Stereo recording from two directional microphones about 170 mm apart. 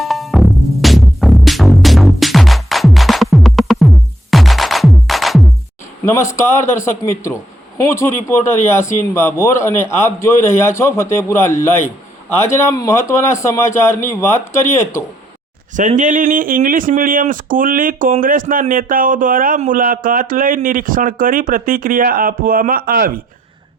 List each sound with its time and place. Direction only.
0.0 s music: centre (ahead or behind)
6.1 s a man's voice: 15° left (ahead or behind)
15.7 s speech: 50° right (ahead or behind)